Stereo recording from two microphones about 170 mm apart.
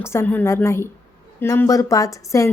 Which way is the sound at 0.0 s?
15° left (ahead or behind).